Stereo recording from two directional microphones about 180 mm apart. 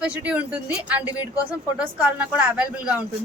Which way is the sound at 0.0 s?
10° right (ahead or behind).